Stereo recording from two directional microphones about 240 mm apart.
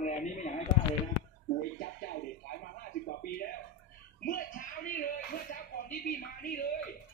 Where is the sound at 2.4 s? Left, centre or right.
Left.